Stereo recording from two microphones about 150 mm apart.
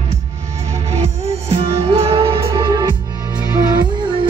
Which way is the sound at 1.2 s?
45° right (ahead or behind).